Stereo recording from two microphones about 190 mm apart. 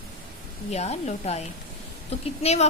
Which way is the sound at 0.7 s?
35° left (ahead or behind).